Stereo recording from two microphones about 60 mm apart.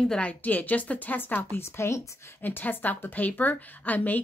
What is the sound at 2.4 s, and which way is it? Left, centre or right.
Speech, left.